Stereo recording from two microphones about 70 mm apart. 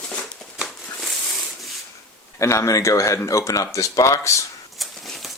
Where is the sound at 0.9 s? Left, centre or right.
Centre.